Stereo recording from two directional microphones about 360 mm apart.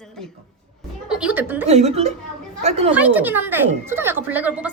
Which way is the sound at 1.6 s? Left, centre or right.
Centre.